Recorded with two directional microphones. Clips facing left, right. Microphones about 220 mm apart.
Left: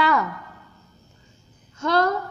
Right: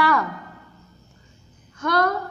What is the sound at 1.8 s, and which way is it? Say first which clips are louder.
Speech: left 1 dB; 25° left (ahead or behind).